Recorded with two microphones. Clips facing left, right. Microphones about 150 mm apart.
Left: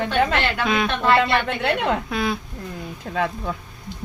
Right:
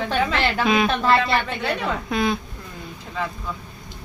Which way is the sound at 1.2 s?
65° left (ahead or behind).